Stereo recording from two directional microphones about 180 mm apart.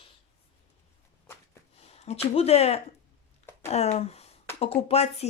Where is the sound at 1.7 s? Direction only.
35° left (ahead or behind).